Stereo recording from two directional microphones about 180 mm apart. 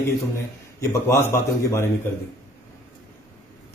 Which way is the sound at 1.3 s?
15° left (ahead or behind).